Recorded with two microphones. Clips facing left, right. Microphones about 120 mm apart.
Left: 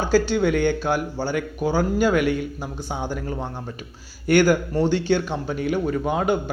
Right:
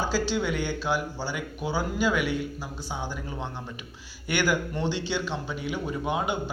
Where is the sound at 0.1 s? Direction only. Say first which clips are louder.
Left 8 dB; 50° left (ahead or behind).